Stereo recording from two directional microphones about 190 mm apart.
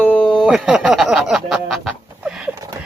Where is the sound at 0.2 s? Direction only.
Centre (ahead or behind).